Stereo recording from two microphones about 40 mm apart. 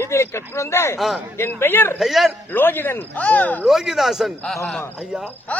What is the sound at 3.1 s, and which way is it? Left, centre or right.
Speech, left.